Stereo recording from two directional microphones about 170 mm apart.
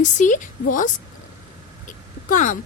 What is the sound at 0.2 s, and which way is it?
Speech, 50° left (ahead or behind).